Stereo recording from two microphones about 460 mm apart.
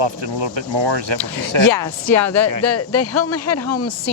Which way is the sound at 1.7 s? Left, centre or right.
Left.